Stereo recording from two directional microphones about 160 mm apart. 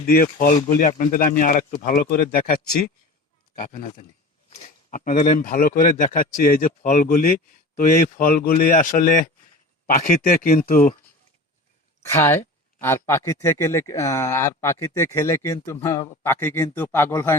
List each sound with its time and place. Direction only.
0.0 s a man's voice: 60° left (ahead or behind)
3.5 s speech: 60° left (ahead or behind)
4.9 s a man's voice: 55° left (ahead or behind)
12.0 s speech: 15° left (ahead or behind)